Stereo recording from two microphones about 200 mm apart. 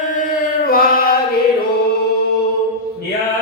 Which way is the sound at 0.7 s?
45° left (ahead or behind).